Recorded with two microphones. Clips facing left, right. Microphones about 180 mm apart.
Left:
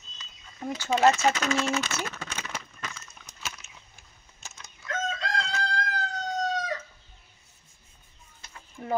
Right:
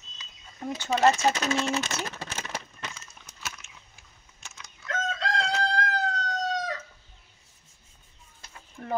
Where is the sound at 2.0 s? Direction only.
35° right (ahead or behind).